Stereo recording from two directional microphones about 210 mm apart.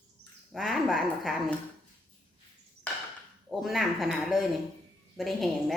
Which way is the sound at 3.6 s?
Centre (ahead or behind).